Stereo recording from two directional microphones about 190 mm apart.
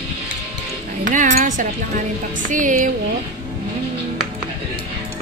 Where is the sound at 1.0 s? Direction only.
40° right (ahead or behind).